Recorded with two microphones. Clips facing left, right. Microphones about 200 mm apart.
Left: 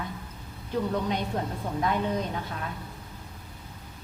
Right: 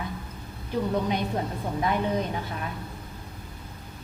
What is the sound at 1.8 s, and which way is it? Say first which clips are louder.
Speech: right 1 dB; 5° right (ahead or behind).